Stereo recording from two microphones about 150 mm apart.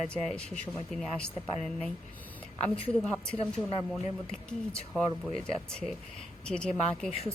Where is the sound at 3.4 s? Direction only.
40° left (ahead or behind).